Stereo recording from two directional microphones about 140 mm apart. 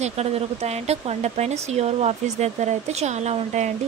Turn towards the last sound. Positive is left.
turn(degrees=-55)  # may be behind; listen again after turning